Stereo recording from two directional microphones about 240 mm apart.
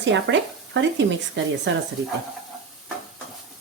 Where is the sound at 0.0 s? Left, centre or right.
Right.